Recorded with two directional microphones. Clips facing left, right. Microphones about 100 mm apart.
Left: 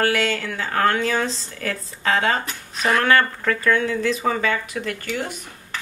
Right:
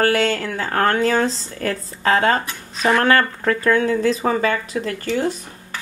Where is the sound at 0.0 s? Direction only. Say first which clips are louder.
Right 3 dB; 40° right (ahead or behind).